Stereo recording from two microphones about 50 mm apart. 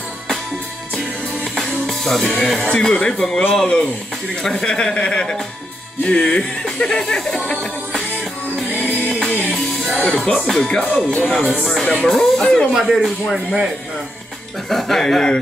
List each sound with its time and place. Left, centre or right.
0.9 s music: centre
2.7 s speech: centre
8.7 s music: left
9.1 s music: centre
9.9 s speech: centre
11.1 s speech: centre
12.7 s speech: centre
14.7 s speech: centre